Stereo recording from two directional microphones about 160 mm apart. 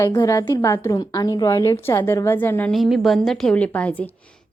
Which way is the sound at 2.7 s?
Centre (ahead or behind).